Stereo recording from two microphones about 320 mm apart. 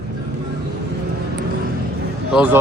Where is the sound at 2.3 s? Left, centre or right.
Centre.